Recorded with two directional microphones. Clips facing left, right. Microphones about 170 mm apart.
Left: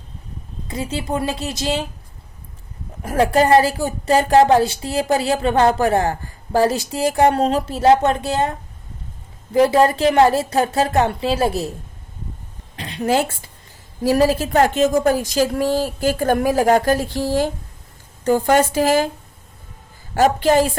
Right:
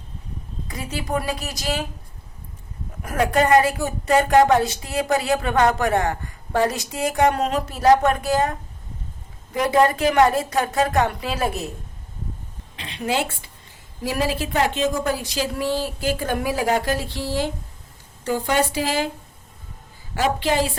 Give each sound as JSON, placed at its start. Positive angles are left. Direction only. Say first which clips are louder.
{"t": 0.7, "sound": "speech", "louder": "left 3 dB", "side_deg": 25}
{"t": 3.0, "sound": "speech", "louder": "left 4 dB", "side_deg": 30}
{"t": 12.7, "sound": "a woman's voice", "louder": "left 5 dB", "side_deg": 40}
{"t": 20.1, "sound": "speech", "louder": "left 6 dB", "side_deg": 45}